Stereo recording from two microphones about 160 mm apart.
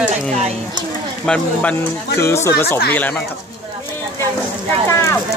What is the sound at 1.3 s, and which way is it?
Speech, 5° left (ahead or behind).